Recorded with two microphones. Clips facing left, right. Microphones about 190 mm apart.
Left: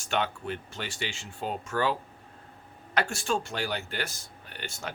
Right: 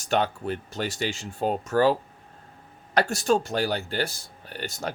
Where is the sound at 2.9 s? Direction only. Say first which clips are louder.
Right 6 dB; 40° right (ahead or behind).